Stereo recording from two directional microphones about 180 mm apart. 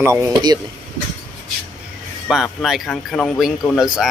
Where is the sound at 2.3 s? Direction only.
Centre (ahead or behind).